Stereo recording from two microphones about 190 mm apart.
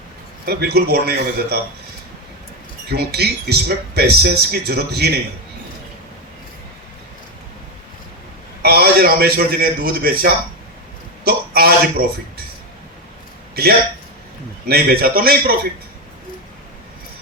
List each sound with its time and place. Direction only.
0.4 s speech: 55° right (ahead or behind)
2.9 s speech: 60° right (ahead or behind)
8.6 s a man's voice: 55° right (ahead or behind)
14.7 s a man's voice: 50° right (ahead or behind)